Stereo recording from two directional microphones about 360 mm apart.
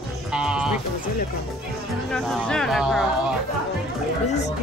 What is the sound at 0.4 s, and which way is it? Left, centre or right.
Speech, centre.